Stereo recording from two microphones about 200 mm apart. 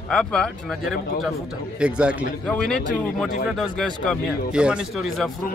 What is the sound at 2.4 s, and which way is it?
A man's voice, 5° left (ahead or behind).